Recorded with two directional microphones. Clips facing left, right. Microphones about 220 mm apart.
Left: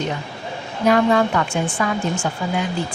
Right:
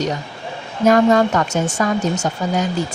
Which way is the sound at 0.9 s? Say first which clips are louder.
Right 3 dB; 45° right (ahead or behind).